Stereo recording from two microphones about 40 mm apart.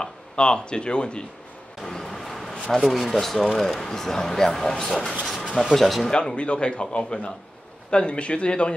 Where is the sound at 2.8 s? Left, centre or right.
Centre.